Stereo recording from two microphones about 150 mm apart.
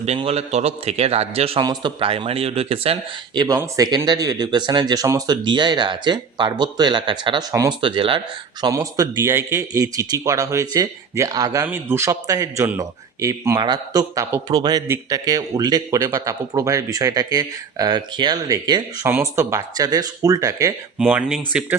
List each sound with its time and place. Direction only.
0.0 s a man's voice: 40° right (ahead or behind)
1.6 s speech: 30° right (ahead or behind)
3.4 s speech: 25° right (ahead or behind)
7.5 s speech: 20° right (ahead or behind)
7.8 s speech: 35° right (ahead or behind)
8.6 s speech: 25° right (ahead or behind)
21.0 s speech: 5° right (ahead or behind)